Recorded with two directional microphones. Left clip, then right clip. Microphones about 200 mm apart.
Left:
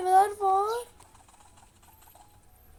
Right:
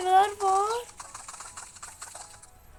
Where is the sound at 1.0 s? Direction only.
35° right (ahead or behind).